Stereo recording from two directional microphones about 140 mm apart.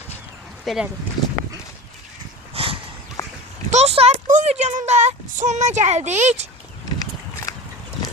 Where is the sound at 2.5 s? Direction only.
40° right (ahead or behind).